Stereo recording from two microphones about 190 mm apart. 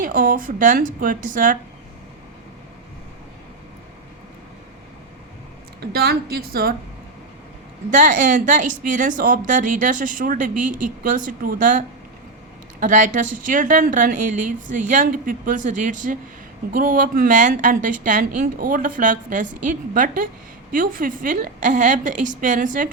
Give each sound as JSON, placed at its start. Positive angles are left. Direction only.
{"t": 0.0, "sound": "speech", "side_deg": -45}
{"t": 5.8, "sound": "speech", "side_deg": -55}
{"t": 7.9, "sound": "speech", "side_deg": -45}